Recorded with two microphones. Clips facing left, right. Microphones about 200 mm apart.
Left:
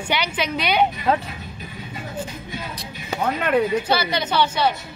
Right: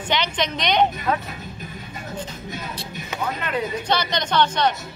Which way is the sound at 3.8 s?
5° left (ahead or behind).